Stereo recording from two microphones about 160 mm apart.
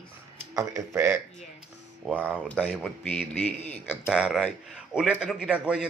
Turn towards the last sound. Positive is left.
turn(degrees=-5)  # may be behind; listen again after turning